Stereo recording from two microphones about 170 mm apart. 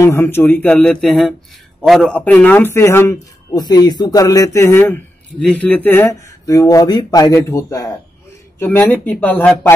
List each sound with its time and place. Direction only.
0.0 s a man's voice: 15° left (ahead or behind)